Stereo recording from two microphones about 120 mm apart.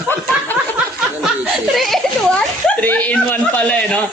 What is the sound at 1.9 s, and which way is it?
Speech, 5° left (ahead or behind).